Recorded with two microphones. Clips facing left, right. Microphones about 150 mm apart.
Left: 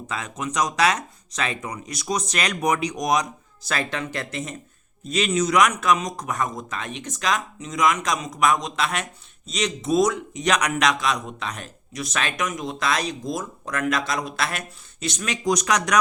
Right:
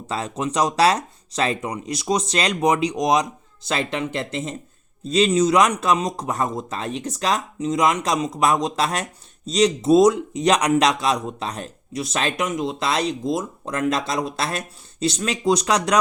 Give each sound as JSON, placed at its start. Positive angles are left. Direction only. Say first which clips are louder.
{"t": 0.1, "sound": "speech", "louder": "right 5 dB", "side_deg": -30}